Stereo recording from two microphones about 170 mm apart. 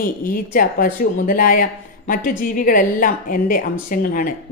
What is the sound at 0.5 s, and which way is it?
A woman's voice, 55° left (ahead or behind).